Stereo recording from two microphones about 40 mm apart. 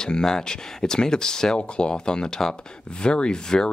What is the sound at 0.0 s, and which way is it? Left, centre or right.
Speech, centre.